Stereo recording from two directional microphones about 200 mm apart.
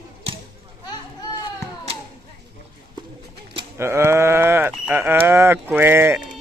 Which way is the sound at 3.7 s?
10° right (ahead or behind).